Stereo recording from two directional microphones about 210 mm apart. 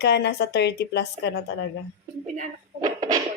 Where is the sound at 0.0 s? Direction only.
50° left (ahead or behind).